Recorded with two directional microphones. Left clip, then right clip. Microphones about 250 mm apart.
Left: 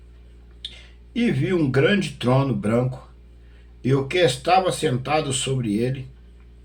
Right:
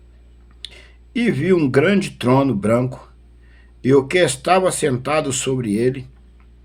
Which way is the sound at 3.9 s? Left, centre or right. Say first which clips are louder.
Right 5 dB; right.